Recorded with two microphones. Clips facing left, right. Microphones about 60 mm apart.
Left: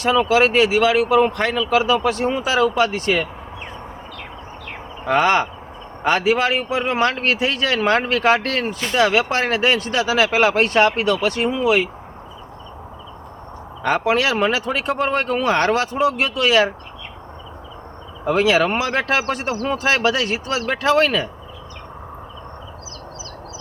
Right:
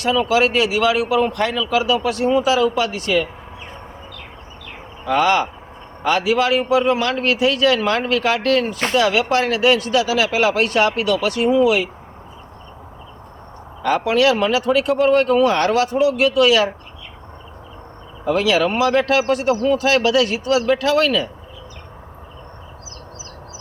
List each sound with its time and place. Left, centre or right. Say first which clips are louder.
0.0 s speech: left 1 dB; left
5.0 s speech: even; left
13.8 s speech: right 2 dB; left
18.3 s speech: even; left